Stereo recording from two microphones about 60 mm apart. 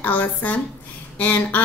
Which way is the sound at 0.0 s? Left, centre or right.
Left.